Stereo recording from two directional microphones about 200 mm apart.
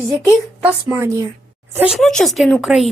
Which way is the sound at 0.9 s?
15° right (ahead or behind).